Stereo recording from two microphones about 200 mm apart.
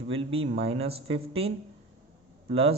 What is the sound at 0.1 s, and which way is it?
A woman's voice, 30° right (ahead or behind).